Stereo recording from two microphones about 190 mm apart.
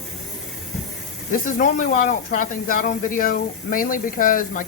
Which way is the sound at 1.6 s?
45° left (ahead or behind).